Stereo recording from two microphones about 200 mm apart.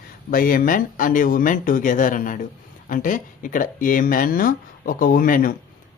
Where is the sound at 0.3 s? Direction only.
45° left (ahead or behind).